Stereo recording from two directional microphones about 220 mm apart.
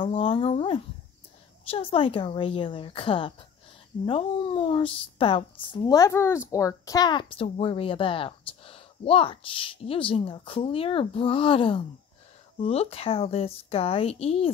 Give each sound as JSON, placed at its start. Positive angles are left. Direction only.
{"t": 0.0, "sound": "a woman's voice", "side_deg": 25}